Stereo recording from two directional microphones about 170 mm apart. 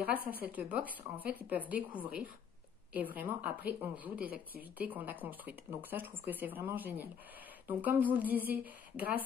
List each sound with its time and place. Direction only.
0.4 s speech: 10° right (ahead or behind)